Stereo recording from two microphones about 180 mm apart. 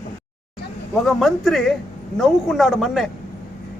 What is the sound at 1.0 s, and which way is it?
A man's voice, centre (ahead or behind).